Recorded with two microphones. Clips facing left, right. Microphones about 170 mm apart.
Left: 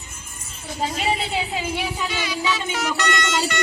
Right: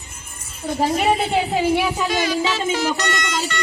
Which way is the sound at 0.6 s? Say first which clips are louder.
Right 6 dB; 55° right (ahead or behind).